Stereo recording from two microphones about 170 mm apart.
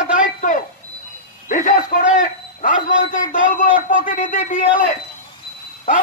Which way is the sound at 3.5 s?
50° left (ahead or behind).